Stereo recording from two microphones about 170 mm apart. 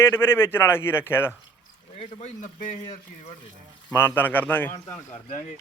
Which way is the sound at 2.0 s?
40° left (ahead or behind).